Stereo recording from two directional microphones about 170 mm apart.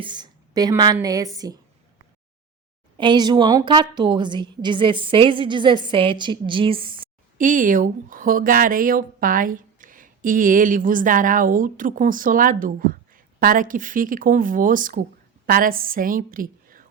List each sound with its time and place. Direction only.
0.0 s a woman's voice: 25° right (ahead or behind)
3.0 s a woman's voice: 25° right (ahead or behind)
7.3 s a woman's voice: 50° right (ahead or behind)